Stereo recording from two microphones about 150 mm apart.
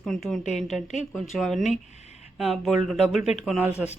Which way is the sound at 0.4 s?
50° left (ahead or behind).